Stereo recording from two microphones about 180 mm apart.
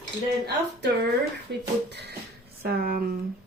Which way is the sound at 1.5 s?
75° right (ahead or behind).